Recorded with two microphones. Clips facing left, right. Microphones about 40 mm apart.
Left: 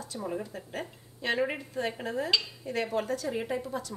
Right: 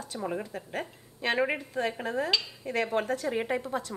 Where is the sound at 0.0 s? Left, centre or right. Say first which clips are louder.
Right 1 dB; right.